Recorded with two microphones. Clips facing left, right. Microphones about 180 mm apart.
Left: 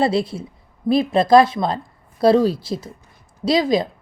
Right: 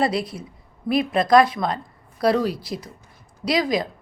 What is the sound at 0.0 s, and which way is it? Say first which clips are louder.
A woman's voice: left 4 dB; 25° left (ahead or behind).